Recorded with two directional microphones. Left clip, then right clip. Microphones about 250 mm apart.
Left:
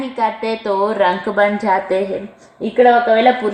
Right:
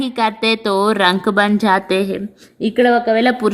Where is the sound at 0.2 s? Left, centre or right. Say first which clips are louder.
Right 2 dB; right.